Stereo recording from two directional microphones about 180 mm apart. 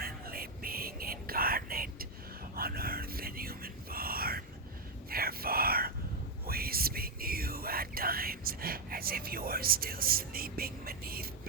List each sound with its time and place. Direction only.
0.0 s whispering: 55° right (ahead or behind)